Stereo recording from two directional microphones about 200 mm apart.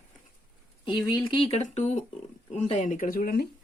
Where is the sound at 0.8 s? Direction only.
20° left (ahead or behind).